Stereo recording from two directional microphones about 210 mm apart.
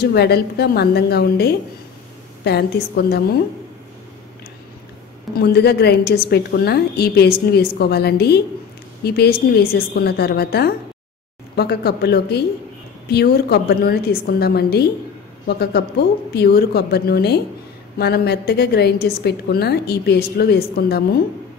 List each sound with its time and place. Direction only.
0.0 s a woman's voice: 50° left (ahead or behind)
5.4 s a woman's voice: 50° left (ahead or behind)